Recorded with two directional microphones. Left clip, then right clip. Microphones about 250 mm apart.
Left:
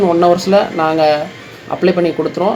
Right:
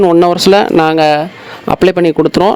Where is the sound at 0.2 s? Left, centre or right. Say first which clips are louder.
Right 3 dB; right.